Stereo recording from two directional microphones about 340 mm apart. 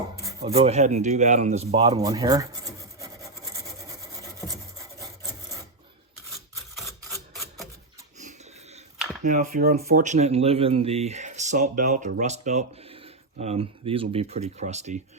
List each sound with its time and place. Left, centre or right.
0.3 s speech: centre
6.7 s a sound: centre
8.2 s dog: right
9.2 s speech: right